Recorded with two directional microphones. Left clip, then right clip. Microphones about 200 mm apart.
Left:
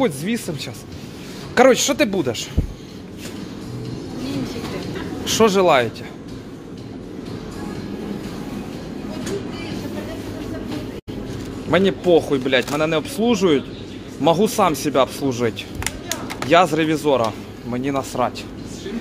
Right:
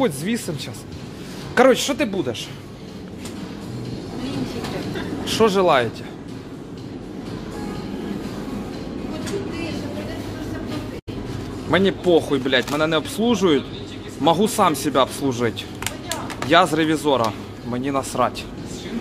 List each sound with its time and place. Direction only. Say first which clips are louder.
0.0 s speech: left 1 dB; 10° left (ahead or behind)
1.5 s speech: left 2 dB; 15° left (ahead or behind)
5.2 s speech: left 2 dB; 20° left (ahead or behind)
11.7 s speech: left 2 dB; 5° left (ahead or behind)